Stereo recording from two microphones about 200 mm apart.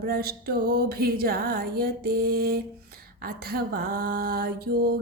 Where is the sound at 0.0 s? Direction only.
50° right (ahead or behind).